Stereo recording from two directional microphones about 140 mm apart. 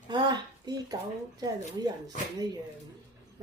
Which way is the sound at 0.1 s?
30° right (ahead or behind).